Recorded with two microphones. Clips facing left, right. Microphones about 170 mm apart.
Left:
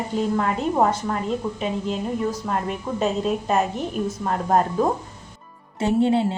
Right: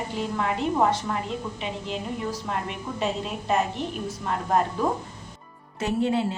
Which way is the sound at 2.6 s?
40° left (ahead or behind).